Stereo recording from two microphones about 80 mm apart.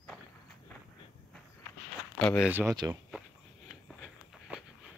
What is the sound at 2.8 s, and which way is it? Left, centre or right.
Speech, right.